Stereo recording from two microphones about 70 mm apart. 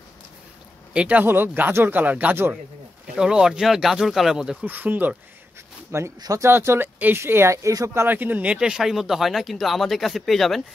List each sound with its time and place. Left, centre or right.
0.9 s speech: centre
1.2 s speech: right
3.2 s speech: centre
4.6 s speech: right
5.9 s speech: right
8.5 s speech: centre